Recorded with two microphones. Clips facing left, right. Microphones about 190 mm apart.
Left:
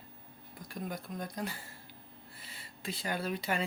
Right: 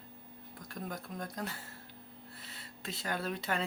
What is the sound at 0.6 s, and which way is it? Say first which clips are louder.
Speech: left 2 dB; centre (ahead or behind).